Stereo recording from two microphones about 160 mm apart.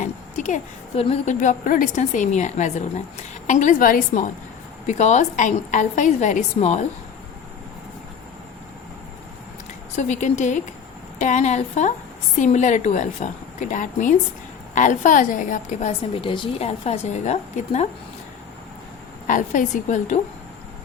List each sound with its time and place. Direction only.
0.0 s a sound: 50° left (ahead or behind)
1.0 s a woman's voice: 45° left (ahead or behind)
9.9 s a woman's voice: 50° left (ahead or behind)
19.3 s a woman's voice: 50° left (ahead or behind)